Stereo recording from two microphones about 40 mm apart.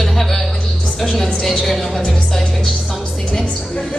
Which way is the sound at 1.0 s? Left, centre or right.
Centre.